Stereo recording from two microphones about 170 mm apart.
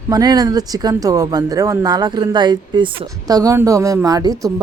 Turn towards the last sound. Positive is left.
turn(degrees=-20)  # may be behind; listen again after turning